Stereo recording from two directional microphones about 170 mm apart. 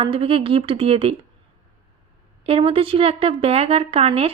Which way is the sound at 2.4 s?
35° right (ahead or behind).